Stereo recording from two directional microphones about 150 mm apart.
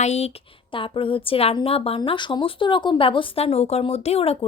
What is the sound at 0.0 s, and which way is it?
A woman's voice, 45° left (ahead or behind).